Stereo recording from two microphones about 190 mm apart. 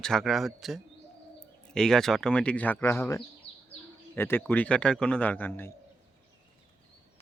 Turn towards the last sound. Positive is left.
turn(degrees=10)  # may be behind; listen again after turning